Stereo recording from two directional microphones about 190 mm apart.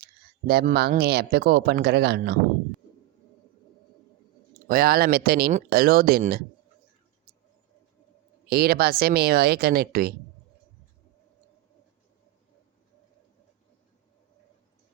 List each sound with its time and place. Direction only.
0.0 s speech: 55° right (ahead or behind)
4.7 s speech: 50° right (ahead or behind)
8.4 s speech: 55° right (ahead or behind)